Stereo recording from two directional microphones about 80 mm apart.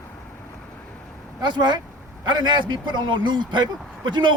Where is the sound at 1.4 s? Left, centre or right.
Right.